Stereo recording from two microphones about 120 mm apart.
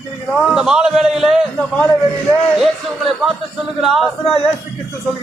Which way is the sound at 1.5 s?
10° left (ahead or behind).